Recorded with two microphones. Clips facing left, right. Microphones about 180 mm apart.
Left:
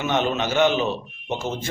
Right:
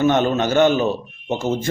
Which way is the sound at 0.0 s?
45° right (ahead or behind).